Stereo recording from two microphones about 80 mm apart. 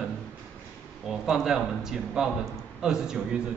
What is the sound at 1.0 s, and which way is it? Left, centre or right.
A man's voice, centre.